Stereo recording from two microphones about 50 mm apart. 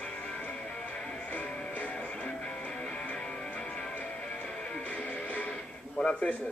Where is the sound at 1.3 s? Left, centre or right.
Left.